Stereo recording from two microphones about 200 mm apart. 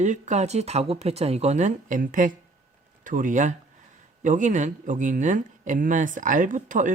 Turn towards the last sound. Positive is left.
turn(degrees=-40)  # may be behind; listen again after turning